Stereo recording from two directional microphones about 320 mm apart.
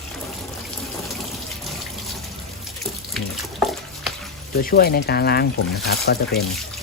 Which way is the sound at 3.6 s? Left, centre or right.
Centre.